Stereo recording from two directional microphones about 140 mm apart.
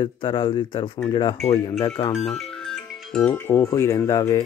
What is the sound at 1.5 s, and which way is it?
Speech, 45° left (ahead or behind).